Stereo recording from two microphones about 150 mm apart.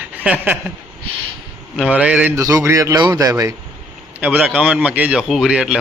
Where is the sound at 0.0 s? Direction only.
10° right (ahead or behind).